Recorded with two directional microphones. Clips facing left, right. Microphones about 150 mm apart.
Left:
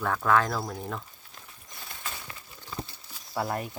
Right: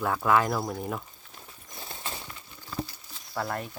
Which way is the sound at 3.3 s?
10° left (ahead or behind).